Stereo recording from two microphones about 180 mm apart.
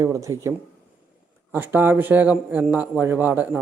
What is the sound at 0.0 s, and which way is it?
Speech, 15° right (ahead or behind).